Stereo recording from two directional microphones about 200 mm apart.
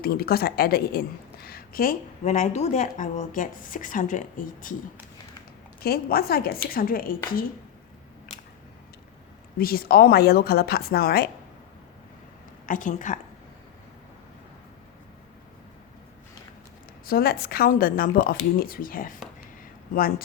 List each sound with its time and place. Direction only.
0.0 s a woman's voice: 50° left (ahead or behind)
5.8 s a woman's voice: 50° left (ahead or behind)
9.6 s a woman's voice: 50° left (ahead or behind)
12.6 s a woman's voice: 40° left (ahead or behind)
17.1 s a woman's voice: 50° left (ahead or behind)